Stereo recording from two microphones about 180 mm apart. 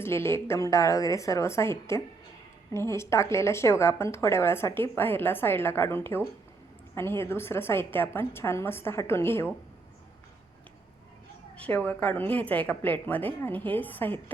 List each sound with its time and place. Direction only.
0.0 s speech: 15° left (ahead or behind)
11.5 s speech: 10° left (ahead or behind)